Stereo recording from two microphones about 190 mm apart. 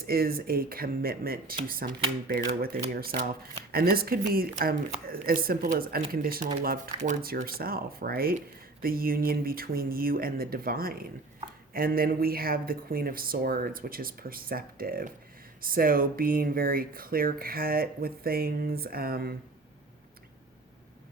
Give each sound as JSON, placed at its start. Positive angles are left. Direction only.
{"t": 0.0, "sound": "speech", "side_deg": -50}